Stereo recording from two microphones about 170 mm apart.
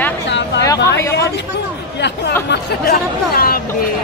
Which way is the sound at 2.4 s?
60° left (ahead or behind).